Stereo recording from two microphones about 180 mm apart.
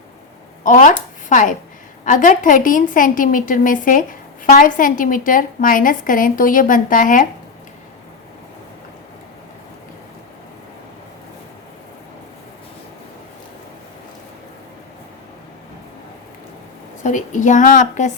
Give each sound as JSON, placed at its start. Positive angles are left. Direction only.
{"t": 0.6, "sound": "a woman's voice", "side_deg": 45}
{"t": 17.0, "sound": "a woman's voice", "side_deg": 45}